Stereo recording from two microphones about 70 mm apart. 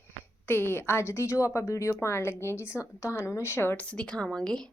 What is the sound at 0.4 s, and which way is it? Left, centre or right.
A woman's voice, left.